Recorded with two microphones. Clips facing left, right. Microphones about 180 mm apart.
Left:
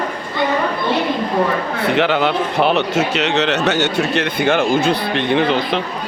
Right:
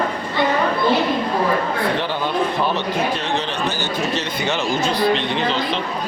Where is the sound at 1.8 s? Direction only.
80° left; by 5.8 s 55° left (ahead or behind).